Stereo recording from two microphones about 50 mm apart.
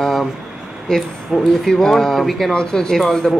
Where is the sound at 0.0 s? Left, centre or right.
Centre.